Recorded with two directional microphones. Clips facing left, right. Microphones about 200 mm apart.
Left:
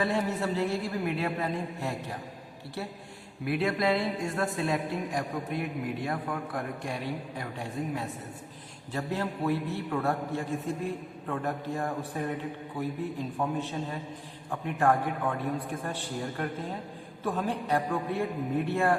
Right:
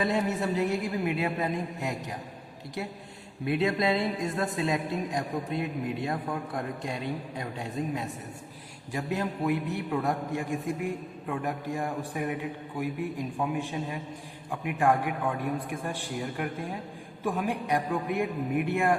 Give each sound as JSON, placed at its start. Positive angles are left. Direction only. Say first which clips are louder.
{"t": 0.0, "sound": "a man's voice", "louder": "right 1 dB", "side_deg": -20}
{"t": 3.4, "sound": "a woman's voice", "louder": "right 1 dB", "side_deg": -20}